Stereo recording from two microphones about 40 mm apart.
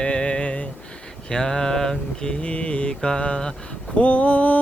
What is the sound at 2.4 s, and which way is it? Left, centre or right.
Mantra, left.